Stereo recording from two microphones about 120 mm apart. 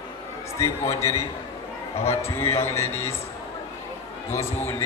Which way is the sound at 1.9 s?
60° left (ahead or behind).